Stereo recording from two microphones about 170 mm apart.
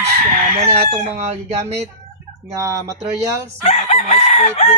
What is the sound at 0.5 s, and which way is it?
Speech, 45° right (ahead or behind).